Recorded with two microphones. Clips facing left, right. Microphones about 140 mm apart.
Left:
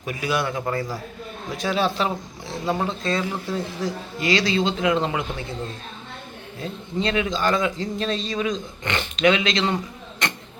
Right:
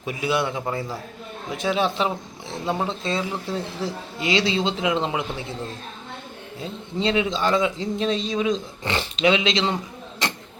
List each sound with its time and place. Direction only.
0.0 s a man's voice: 25° right (ahead or behind)
0.6 s a man's voice: 5° right (ahead or behind)
1.5 s a man's voice: 20° right (ahead or behind)
6.6 s a man's voice: 25° right (ahead or behind)